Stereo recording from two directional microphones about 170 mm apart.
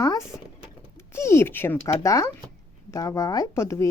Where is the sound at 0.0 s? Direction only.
20° left (ahead or behind).